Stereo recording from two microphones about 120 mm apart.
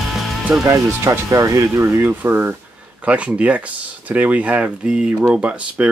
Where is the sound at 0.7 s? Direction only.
25° right (ahead or behind).